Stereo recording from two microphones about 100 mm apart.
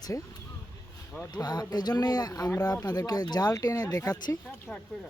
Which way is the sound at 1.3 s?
45° left (ahead or behind).